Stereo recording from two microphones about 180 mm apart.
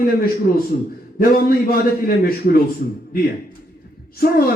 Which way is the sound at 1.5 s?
55° left (ahead or behind).